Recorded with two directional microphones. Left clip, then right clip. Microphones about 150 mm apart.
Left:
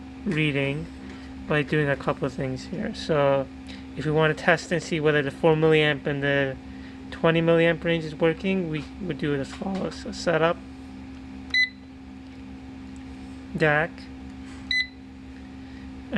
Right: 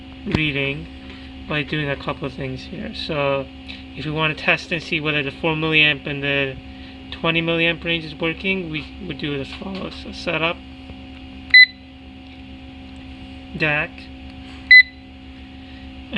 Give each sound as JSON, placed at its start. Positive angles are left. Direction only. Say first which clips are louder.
{"t": 0.3, "sound": "speech", "louder": "right 4 dB", "side_deg": 10}
{"t": 13.6, "sound": "speech", "louder": "right 1 dB", "side_deg": 5}